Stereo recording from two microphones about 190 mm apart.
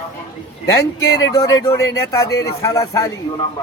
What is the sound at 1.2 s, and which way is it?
Speech, 20° left (ahead or behind).